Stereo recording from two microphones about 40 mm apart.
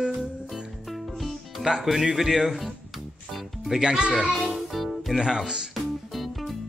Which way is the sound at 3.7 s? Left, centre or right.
Right.